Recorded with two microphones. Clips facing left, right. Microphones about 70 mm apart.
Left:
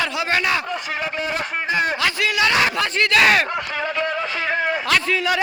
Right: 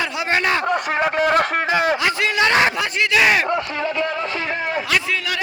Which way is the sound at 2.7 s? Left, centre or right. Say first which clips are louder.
Left 1 dB; centre.